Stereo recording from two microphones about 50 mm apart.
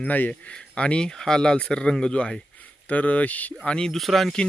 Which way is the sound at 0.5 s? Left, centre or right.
Left.